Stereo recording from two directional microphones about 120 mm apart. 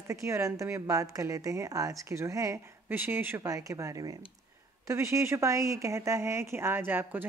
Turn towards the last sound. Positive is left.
turn(degrees=-20)  # may be behind; listen again after turning